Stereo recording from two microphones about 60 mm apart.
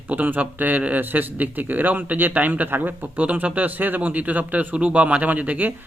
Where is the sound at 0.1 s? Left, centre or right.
Right.